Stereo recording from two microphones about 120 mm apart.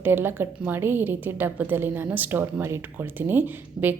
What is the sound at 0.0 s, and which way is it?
A woman's voice, 20° right (ahead or behind).